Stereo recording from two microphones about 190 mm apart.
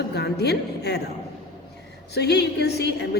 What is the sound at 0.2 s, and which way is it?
Speech, 60° left (ahead or behind).